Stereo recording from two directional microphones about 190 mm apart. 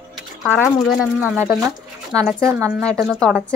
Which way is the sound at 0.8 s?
10° right (ahead or behind).